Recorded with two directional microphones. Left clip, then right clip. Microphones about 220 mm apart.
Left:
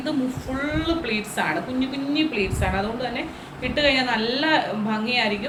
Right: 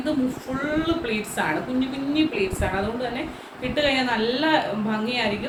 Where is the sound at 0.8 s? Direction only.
15° right (ahead or behind).